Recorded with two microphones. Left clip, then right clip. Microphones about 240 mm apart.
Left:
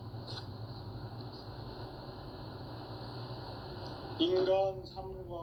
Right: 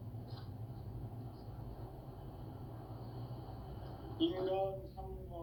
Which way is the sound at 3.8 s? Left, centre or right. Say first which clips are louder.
Left 4 dB; left.